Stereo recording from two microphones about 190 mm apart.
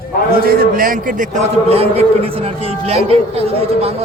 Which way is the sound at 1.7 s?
30° right (ahead or behind).